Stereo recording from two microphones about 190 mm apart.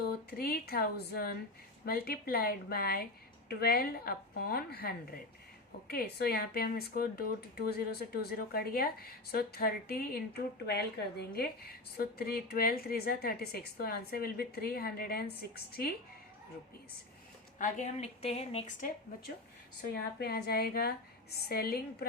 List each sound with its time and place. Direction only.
0.3 s a woman's voice: 50° left (ahead or behind)
17.6 s a woman's voice: 35° left (ahead or behind)
19.8 s a woman's voice: 55° left (ahead or behind)